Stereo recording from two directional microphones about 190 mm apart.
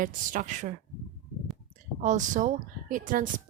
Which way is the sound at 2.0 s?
40° right (ahead or behind).